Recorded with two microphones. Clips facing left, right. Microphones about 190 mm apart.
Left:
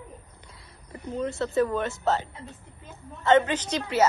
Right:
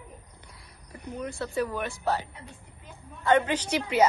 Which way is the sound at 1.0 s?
20° left (ahead or behind).